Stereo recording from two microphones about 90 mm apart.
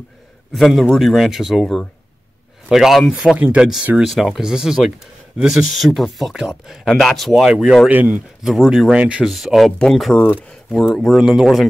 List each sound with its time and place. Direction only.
0.5 s speech: centre (ahead or behind)
3.3 s speech: 20° right (ahead or behind)
4.0 s speech: centre (ahead or behind)
7.9 s speech: 15° right (ahead or behind)
8.5 s speech: 5° right (ahead or behind)